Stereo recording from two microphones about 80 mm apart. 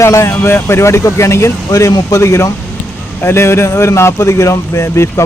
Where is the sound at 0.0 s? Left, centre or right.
Left.